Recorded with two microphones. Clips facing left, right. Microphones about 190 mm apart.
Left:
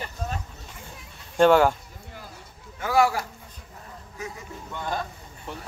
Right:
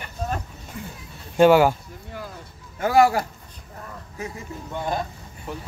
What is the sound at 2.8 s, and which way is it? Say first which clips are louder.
Speech: right 4 dB; 45° right (ahead or behind).